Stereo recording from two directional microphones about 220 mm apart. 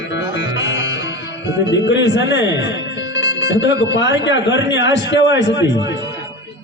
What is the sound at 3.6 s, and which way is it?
A man's voice, 55° left (ahead or behind).